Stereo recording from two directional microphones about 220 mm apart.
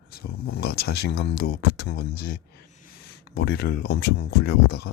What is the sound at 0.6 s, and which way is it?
Speech, 45° left (ahead or behind).